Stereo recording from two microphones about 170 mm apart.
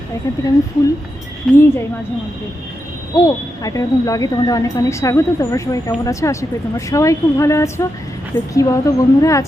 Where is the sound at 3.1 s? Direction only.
20° left (ahead or behind).